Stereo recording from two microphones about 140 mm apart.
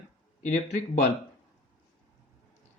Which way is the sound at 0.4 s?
60° left (ahead or behind).